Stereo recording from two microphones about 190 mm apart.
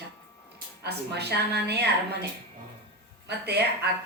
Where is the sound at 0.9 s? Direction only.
60° right (ahead or behind).